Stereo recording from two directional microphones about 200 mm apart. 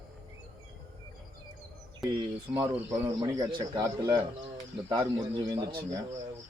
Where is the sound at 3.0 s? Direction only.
20° right (ahead or behind).